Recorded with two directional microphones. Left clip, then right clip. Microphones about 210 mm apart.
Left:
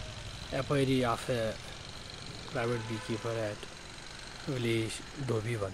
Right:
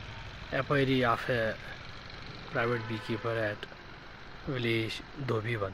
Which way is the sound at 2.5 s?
5° left (ahead or behind).